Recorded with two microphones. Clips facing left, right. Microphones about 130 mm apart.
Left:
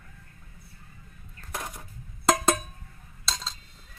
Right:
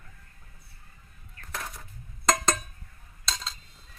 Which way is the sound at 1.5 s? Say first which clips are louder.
Left 2 dB; 15° left (ahead or behind).